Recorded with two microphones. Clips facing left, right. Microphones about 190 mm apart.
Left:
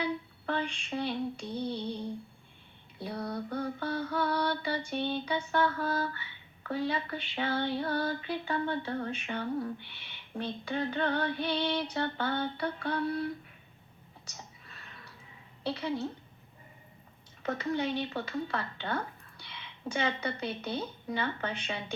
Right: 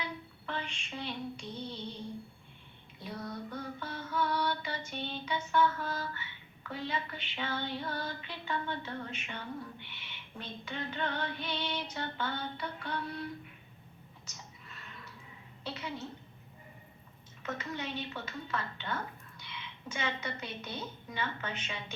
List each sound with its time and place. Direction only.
0.4 s female singing: 35° left (ahead or behind)
3.0 s female singing: 35° left (ahead or behind)
14.3 s a sound: 35° left (ahead or behind)
15.6 s female singing: 35° left (ahead or behind)
17.4 s speech: 35° left (ahead or behind)
20.6 s female singing: 35° left (ahead or behind)